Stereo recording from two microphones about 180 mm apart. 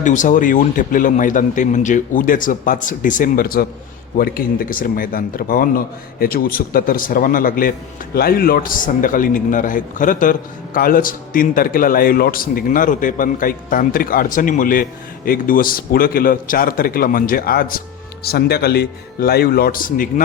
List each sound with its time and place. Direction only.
0.0 s a man's voice: 45° left (ahead or behind)